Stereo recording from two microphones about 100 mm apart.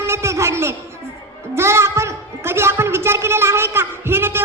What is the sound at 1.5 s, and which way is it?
A woman's voice, 25° right (ahead or behind).